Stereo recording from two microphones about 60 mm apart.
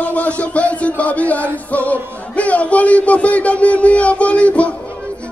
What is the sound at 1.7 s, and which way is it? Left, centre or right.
Music, left.